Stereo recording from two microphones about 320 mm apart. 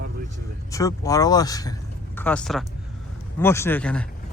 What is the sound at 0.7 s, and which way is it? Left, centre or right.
Speech, centre.